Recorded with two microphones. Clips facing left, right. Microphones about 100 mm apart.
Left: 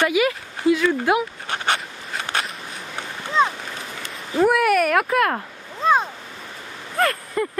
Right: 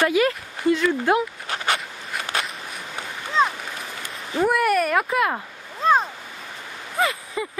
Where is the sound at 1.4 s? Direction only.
25° left (ahead or behind).